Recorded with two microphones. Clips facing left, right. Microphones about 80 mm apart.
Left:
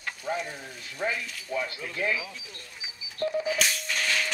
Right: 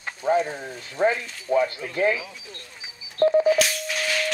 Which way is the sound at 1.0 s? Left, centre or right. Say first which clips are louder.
Right 9 dB; right.